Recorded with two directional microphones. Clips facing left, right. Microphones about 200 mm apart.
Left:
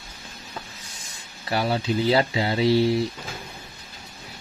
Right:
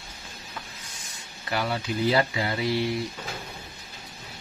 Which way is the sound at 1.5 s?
30° left (ahead or behind).